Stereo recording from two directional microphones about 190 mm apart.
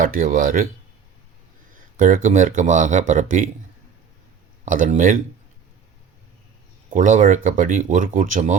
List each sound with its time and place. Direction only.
0.0 s speech: 50° right (ahead or behind)
2.0 s speech: 45° right (ahead or behind)
4.6 s speech: 45° right (ahead or behind)
6.9 s speech: 45° right (ahead or behind)